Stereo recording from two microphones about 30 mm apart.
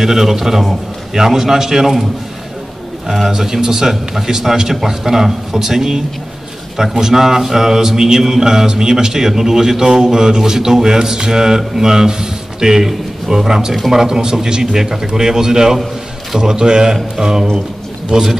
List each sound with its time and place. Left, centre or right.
0.0 s a man's voice: centre
3.3 s a man's voice: centre
16.9 s a man's voice: centre